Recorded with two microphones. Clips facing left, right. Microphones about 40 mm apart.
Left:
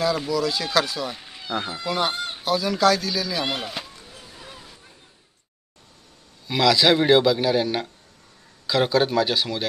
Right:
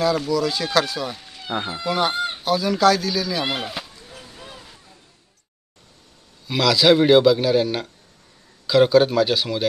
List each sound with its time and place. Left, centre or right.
0.3 s a man's voice: centre
1.1 s cat: centre
1.5 s speech: centre
1.9 s a man's voice: centre
6.4 s a man's voice: centre